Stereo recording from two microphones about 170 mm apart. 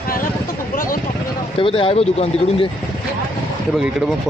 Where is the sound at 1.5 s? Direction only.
30° left (ahead or behind).